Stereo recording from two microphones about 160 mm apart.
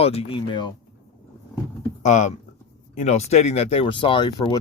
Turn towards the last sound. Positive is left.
turn(degrees=25)  # may be behind; listen again after turning